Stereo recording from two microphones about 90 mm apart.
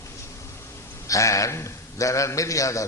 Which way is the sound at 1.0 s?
35° left (ahead or behind).